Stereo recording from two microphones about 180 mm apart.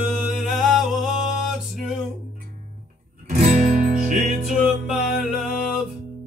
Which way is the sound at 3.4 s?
45° right (ahead or behind).